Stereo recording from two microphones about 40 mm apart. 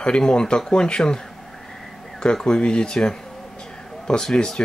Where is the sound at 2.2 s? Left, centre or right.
Left.